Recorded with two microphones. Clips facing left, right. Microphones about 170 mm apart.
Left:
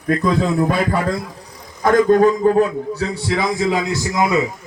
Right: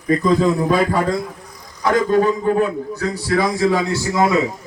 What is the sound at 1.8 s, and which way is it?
Speech, 45° left (ahead or behind).